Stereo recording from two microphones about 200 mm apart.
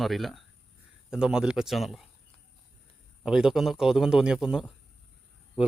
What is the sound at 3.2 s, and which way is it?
A man's voice, 5° right (ahead or behind).